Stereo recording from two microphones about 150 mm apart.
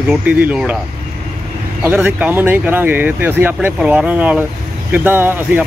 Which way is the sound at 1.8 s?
10° right (ahead or behind).